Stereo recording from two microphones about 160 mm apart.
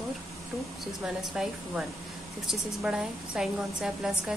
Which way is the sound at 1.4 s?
5° right (ahead or behind).